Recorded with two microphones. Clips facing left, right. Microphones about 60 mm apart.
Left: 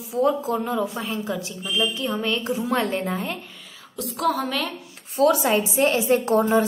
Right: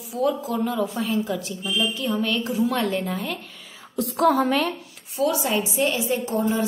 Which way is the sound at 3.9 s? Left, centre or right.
Right.